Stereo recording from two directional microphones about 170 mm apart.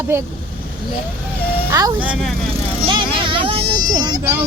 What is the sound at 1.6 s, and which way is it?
Speech, 20° right (ahead or behind).